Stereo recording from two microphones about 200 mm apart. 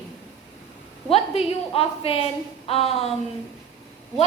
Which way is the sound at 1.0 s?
30° left (ahead or behind).